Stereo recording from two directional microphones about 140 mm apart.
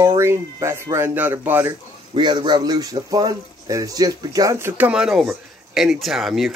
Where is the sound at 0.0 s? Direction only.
20° right (ahead or behind).